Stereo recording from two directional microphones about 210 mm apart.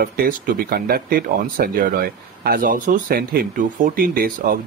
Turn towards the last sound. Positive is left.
turn(degrees=-45)  # may be behind; listen again after turning